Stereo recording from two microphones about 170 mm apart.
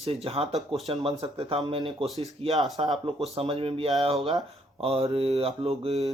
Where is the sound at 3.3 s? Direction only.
30° right (ahead or behind).